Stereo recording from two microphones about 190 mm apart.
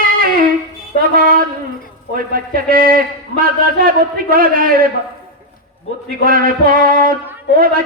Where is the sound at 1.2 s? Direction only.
50° right (ahead or behind).